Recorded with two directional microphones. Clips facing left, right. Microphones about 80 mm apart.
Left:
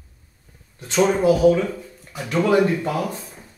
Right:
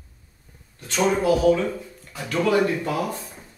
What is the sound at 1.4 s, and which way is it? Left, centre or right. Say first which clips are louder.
Speech: left 3 dB; centre.